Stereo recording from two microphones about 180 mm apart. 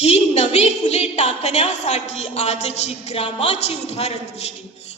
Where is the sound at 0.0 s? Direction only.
40° left (ahead or behind).